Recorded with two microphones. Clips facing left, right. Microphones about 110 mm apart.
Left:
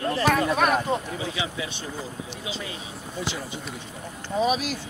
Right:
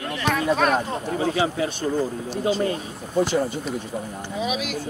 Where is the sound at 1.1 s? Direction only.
45° right (ahead or behind).